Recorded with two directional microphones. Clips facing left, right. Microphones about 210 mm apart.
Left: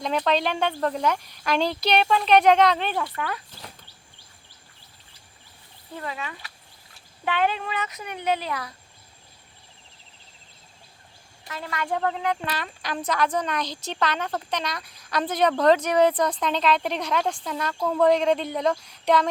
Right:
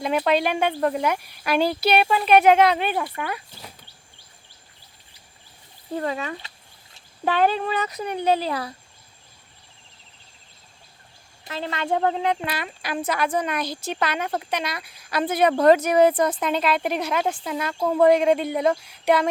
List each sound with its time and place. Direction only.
0.0 s speech: 10° right (ahead or behind)
6.0 s speech: 40° right (ahead or behind)
11.4 s a woman's voice: 25° right (ahead or behind)
12.5 s speech: 10° right (ahead or behind)